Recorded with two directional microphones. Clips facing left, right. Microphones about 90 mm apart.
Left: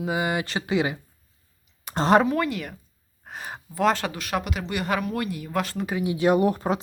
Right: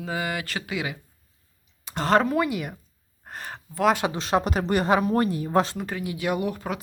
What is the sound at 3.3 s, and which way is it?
Speech, 5° left (ahead or behind).